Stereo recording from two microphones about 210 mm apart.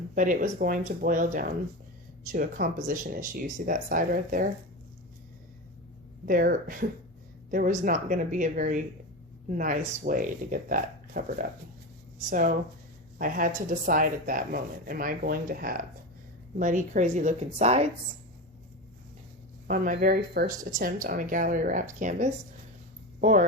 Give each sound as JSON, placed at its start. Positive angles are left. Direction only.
{"t": 0.1, "sound": "speech", "side_deg": -40}
{"t": 6.2, "sound": "speech", "side_deg": -40}
{"t": 19.6, "sound": "speech", "side_deg": -40}